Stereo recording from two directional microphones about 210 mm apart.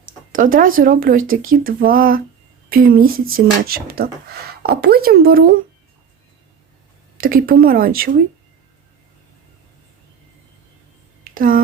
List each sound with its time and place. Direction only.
0.3 s speech: 40° right (ahead or behind)
7.2 s speech: 45° right (ahead or behind)
11.2 s a sound: 40° right (ahead or behind)